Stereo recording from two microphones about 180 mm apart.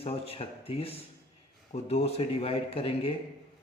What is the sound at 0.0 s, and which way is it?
Speech, 35° left (ahead or behind).